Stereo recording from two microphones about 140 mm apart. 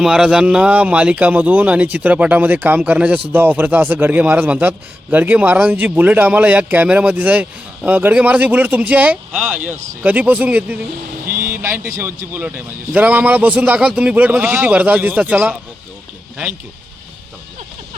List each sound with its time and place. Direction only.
0.0 s speech: 5° right (ahead or behind)
11.3 s vehicle: 90° right
11.5 s speech: 20° right (ahead or behind)